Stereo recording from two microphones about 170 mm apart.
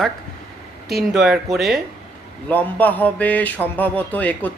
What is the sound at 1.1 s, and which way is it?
A man's voice, 5° right (ahead or behind).